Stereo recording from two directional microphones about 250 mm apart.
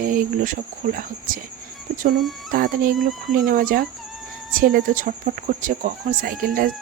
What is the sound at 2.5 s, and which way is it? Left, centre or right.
Speech, right.